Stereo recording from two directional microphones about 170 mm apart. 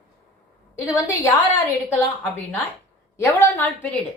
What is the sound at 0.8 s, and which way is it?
Speech, 20° left (ahead or behind).